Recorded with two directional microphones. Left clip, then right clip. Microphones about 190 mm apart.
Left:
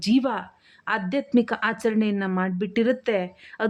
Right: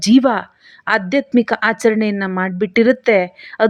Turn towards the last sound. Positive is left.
turn(degrees=-20)  # may be behind; listen again after turning